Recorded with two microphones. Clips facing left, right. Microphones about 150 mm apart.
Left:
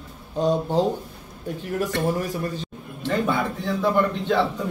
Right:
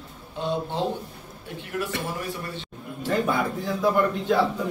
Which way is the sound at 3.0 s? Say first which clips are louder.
Left 1 dB; 5° right (ahead or behind).